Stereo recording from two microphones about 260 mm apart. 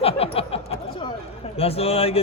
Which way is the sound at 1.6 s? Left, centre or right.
Left.